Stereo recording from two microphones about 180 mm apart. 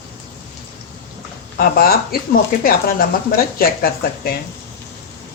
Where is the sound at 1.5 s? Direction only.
55° left (ahead or behind).